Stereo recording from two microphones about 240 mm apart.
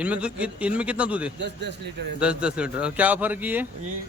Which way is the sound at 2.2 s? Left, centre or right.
Centre.